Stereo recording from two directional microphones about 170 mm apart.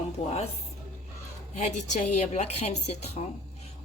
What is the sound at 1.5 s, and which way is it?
A woman's voice, 40° left (ahead or behind).